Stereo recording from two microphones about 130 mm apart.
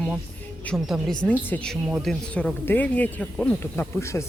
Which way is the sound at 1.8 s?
Centre (ahead or behind).